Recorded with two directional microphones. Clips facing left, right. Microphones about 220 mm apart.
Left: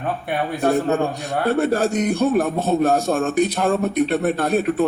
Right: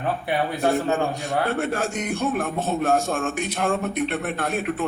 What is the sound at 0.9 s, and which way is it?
Speech, 35° left (ahead or behind).